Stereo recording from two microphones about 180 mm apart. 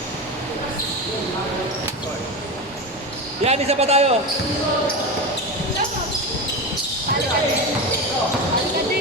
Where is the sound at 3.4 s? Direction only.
35° right (ahead or behind).